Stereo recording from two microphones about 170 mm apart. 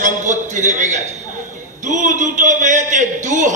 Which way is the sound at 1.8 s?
50° right (ahead or behind).